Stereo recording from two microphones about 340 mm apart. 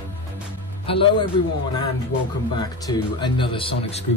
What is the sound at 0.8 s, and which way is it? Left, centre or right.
Speech, centre.